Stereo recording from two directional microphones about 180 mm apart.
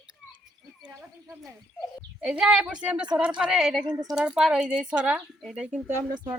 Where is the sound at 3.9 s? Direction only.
20° right (ahead or behind).